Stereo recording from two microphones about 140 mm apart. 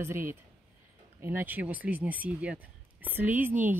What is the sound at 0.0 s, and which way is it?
Speech, 15° right (ahead or behind).